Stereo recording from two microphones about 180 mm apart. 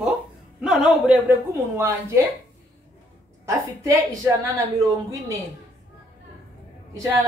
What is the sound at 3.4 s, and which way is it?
Speech, 15° right (ahead or behind).